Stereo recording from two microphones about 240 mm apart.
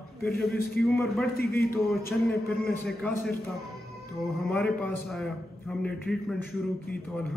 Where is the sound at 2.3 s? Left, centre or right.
Centre.